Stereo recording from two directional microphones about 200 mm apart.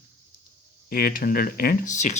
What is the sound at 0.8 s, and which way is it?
Speech, 45° left (ahead or behind).